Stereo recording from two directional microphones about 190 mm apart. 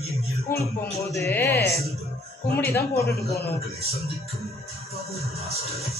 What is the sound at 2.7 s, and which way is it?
Speech, 10° left (ahead or behind).